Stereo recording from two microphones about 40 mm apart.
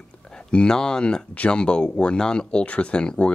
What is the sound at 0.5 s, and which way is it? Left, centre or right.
Speech, left.